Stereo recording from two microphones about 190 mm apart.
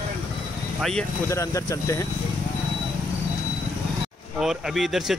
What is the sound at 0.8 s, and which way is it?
Speech, centre (ahead or behind).